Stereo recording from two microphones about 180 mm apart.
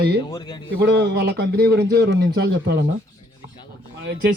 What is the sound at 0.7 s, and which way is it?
A man's voice, 70° right (ahead or behind).